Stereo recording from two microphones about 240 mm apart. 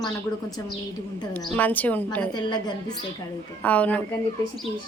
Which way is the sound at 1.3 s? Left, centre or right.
Centre.